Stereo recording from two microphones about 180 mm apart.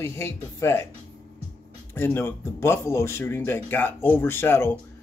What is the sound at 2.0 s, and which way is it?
A man's voice, 15° left (ahead or behind).